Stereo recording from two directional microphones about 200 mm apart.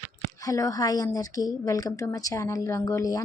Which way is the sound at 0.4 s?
15° left (ahead or behind).